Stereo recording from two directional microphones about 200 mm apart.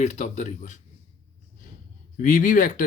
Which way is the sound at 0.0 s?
35° left (ahead or behind).